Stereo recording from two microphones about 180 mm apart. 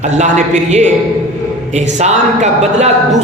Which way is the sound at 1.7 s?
40° right (ahead or behind).